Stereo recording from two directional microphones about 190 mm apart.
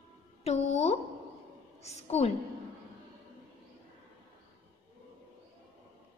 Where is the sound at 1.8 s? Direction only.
35° left (ahead or behind).